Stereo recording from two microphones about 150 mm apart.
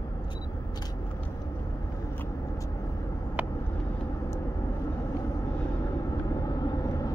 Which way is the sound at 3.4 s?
10° right (ahead or behind).